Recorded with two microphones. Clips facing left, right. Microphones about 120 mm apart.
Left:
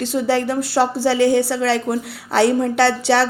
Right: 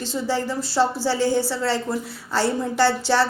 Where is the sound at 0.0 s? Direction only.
65° left (ahead or behind).